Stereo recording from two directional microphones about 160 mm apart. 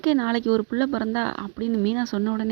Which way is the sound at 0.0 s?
35° right (ahead or behind).